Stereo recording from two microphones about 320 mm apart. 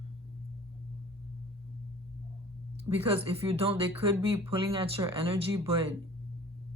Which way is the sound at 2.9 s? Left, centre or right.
Centre.